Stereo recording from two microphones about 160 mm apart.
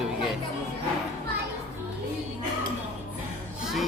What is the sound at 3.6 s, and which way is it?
Music, centre (ahead or behind).